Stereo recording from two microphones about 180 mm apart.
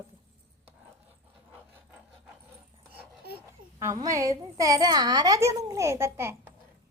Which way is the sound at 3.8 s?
20° right (ahead or behind).